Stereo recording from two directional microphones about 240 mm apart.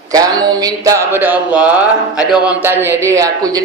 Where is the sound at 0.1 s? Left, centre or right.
Centre.